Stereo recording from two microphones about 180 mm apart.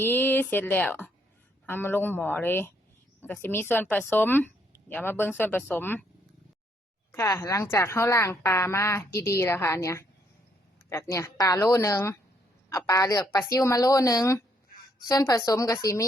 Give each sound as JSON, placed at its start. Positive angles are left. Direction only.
{"t": 0.0, "sound": "a woman's voice", "side_deg": 10}
{"t": 7.1, "sound": "a woman's voice", "side_deg": 15}